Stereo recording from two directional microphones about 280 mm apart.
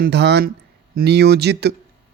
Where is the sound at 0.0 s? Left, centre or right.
Right.